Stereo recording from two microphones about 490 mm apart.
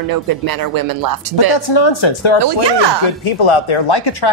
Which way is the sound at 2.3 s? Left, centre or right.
Right.